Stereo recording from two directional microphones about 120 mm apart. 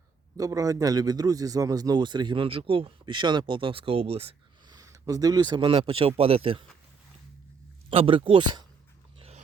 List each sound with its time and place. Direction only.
0.3 s a man's voice: 30° right (ahead or behind); by 4.4 s 55° right (ahead or behind)
4.7 s speech: 30° right (ahead or behind); by 6.7 s 50° right (ahead or behind)
7.9 s speech: 45° right (ahead or behind)
9.1 s dog: 60° right (ahead or behind)